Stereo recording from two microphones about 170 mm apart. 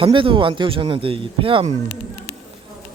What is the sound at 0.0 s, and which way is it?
Speech, 30° right (ahead or behind).